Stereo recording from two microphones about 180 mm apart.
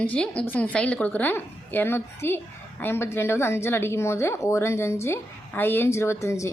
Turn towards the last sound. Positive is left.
turn(degrees=15)  # may be behind; listen again after turning